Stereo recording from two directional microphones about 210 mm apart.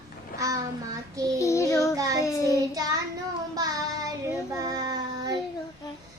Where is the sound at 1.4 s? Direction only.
15° left (ahead or behind).